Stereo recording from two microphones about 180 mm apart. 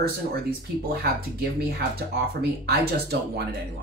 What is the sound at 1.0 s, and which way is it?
Speech, 60° right (ahead or behind).